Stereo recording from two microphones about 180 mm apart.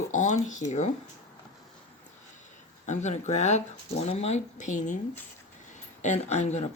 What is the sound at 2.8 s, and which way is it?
Speech, 40° left (ahead or behind).